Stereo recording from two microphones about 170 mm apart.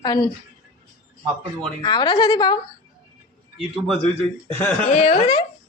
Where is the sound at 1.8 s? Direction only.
25° left (ahead or behind).